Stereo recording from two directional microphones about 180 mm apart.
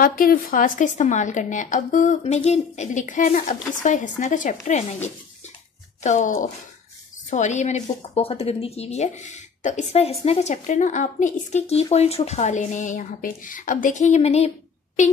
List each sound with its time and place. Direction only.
0.0 s a woman's voice: 55° left (ahead or behind); by 14.5 s 35° left (ahead or behind)